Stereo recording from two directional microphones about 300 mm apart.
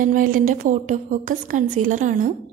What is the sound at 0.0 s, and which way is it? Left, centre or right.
A woman's voice, right.